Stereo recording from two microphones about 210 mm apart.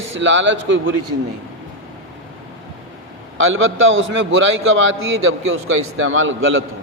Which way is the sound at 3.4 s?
70° right (ahead or behind).